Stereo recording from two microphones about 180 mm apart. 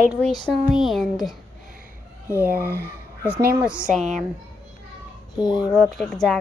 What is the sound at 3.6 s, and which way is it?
Speech, 5° right (ahead or behind).